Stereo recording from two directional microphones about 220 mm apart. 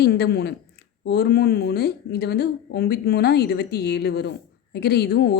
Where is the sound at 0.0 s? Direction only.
45° left (ahead or behind).